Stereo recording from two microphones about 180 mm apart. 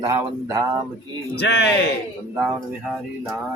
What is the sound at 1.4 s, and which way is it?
Speech, 75° left (ahead or behind).